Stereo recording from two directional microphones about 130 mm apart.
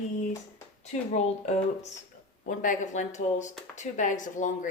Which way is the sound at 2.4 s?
90° left.